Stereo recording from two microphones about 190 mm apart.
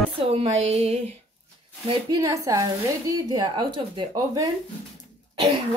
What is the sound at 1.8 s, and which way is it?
Speech, 20° right (ahead or behind).